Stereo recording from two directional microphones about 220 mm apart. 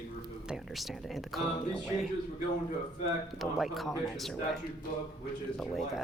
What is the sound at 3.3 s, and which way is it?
Speech, centre (ahead or behind).